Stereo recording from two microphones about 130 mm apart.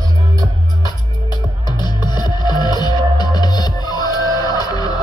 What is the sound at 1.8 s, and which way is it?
Music, 35° left (ahead or behind).